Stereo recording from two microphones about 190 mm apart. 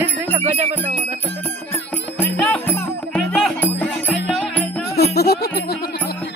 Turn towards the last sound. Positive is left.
turn(degrees=55)  # may be behind; listen again after turning